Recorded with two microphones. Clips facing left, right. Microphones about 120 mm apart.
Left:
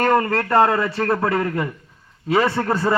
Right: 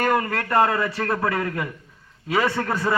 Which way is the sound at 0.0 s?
30° left (ahead or behind).